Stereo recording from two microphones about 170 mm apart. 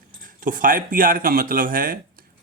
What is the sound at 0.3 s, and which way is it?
A man's voice, 55° right (ahead or behind).